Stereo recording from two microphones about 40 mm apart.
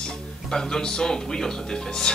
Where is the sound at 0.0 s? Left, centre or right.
Centre.